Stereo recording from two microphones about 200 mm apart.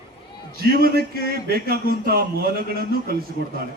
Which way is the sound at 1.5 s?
50° right (ahead or behind).